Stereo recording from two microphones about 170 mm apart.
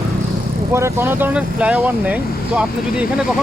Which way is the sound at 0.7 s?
15° right (ahead or behind).